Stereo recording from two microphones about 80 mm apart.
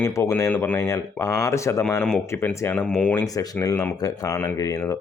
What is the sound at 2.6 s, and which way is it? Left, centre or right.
Speech, left.